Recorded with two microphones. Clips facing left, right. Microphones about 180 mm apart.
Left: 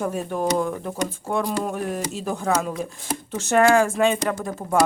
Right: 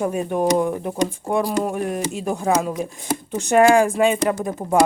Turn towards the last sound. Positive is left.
turn(degrees=-20)  # may be behind; listen again after turning